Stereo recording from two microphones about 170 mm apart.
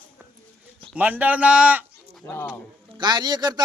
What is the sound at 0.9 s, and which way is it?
Speech, 10° right (ahead or behind).